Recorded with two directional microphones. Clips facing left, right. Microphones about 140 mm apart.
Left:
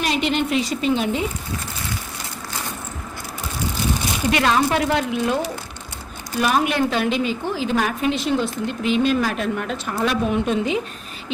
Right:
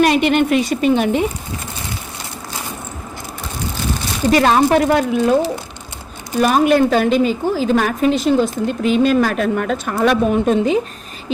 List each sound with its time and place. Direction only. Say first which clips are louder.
0.0 s a woman's voice: right 8 dB; 55° right (ahead or behind)
4.3 s a woman's voice: right 6 dB; 40° right (ahead or behind)
10.3 s a woman's voice: right 6 dB; 40° right (ahead or behind)